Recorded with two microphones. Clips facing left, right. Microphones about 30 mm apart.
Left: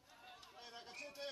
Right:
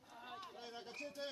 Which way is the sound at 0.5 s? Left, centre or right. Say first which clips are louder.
Right 3 dB; centre.